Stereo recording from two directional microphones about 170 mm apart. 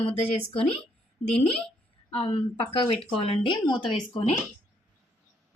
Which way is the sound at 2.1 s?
30° left (ahead or behind).